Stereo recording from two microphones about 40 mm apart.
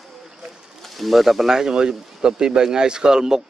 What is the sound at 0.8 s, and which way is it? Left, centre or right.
Speech, centre.